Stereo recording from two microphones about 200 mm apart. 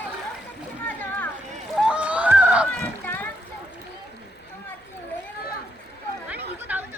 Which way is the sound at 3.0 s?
10° left (ahead or behind).